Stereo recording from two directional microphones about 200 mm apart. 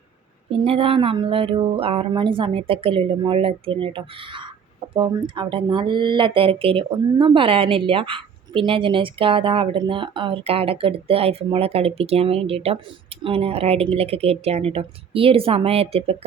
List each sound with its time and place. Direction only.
0.5 s speech: 30° right (ahead or behind)